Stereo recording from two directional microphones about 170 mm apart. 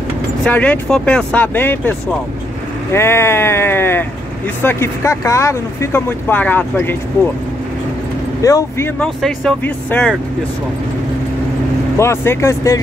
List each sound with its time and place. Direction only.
0.5 s speech: 10° left (ahead or behind)
8.4 s speech: 20° left (ahead or behind)
9.0 s speech: 5° left (ahead or behind)
12.0 s speech: 15° left (ahead or behind)